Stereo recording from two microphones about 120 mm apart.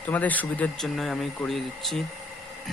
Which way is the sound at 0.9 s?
Centre (ahead or behind).